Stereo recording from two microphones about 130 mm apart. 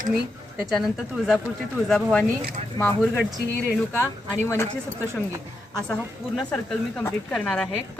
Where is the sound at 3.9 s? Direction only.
20° left (ahead or behind).